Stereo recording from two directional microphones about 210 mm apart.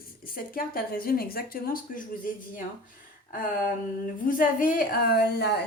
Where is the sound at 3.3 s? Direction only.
40° left (ahead or behind).